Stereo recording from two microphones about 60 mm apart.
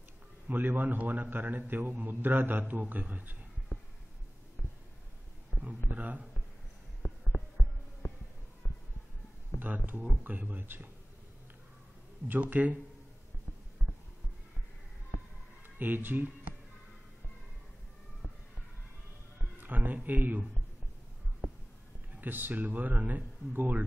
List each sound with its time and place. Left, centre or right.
0.5 s a man's voice: right
5.5 s a sound: centre
5.9 s a man's voice: right
7.0 s a sound: left
8.0 s music: left
9.6 s a man's voice: right
12.3 s speech: right
15.8 s speech: right
19.6 s a man's voice: right
22.1 s speech: right